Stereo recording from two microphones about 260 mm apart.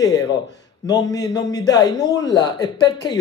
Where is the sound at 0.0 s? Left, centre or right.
Centre.